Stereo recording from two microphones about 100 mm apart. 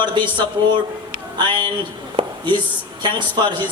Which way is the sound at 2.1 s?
50° right (ahead or behind).